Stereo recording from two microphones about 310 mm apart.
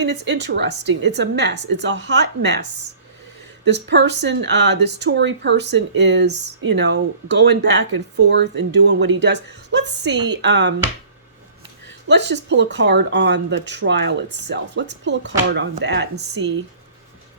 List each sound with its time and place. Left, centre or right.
0.0 s speech: right
3.6 s speech: right
12.0 s speech: right